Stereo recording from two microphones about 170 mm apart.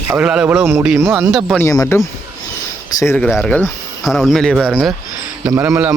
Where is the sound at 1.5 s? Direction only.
20° left (ahead or behind).